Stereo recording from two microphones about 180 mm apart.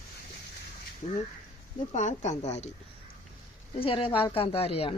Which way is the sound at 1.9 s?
40° left (ahead or behind).